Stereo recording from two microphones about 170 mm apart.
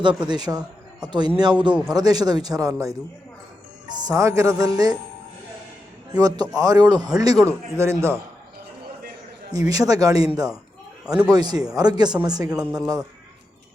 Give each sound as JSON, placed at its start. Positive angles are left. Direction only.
{"t": 0.0, "sound": "speech", "side_deg": -25}
{"t": 4.0, "sound": "speech", "side_deg": -20}
{"t": 6.1, "sound": "speech", "side_deg": -25}
{"t": 9.5, "sound": "speech", "side_deg": -20}
{"t": 11.0, "sound": "speech", "side_deg": -5}
{"t": 11.3, "sound": "speech", "side_deg": -25}
{"t": 12.5, "sound": "a man's voice", "side_deg": -5}